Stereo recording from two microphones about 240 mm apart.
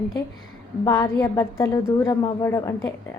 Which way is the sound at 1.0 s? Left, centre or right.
Centre.